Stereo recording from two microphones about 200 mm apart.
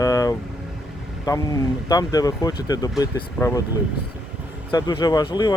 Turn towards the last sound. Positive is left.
turn(degrees=20)  # may be behind; listen again after turning